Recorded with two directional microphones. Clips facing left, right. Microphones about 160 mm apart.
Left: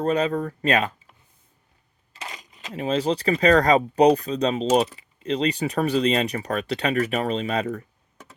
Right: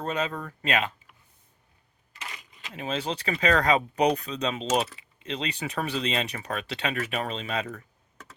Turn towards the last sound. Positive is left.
turn(degrees=40)  # may be behind; listen again after turning